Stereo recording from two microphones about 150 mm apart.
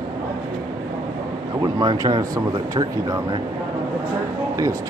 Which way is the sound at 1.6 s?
30° right (ahead or behind).